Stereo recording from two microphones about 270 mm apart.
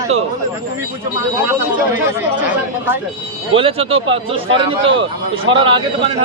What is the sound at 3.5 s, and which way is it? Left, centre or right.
A man's voice, right.